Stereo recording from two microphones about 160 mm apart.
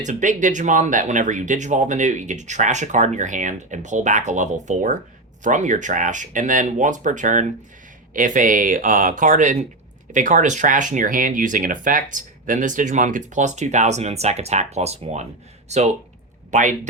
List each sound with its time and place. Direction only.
0.0 s speech: 50° right (ahead or behind)